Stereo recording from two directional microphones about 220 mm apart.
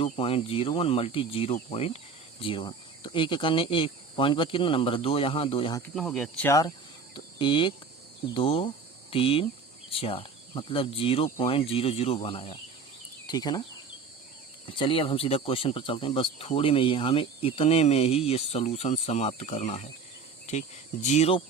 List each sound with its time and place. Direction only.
0.0 s speech: 25° left (ahead or behind)
5.9 s speech: centre (ahead or behind); by 13.7 s 20° left (ahead or behind)
14.8 s speech: 25° left (ahead or behind)